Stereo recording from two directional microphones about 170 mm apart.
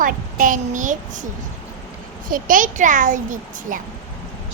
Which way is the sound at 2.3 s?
55° right (ahead or behind).